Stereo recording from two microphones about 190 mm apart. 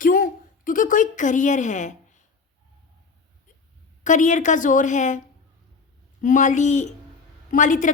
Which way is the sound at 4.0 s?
40° left (ahead or behind).